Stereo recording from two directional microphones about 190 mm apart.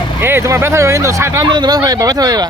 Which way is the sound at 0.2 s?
10° right (ahead or behind).